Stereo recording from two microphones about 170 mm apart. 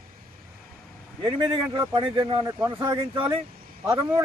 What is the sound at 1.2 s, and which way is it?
Speech, 30° right (ahead or behind).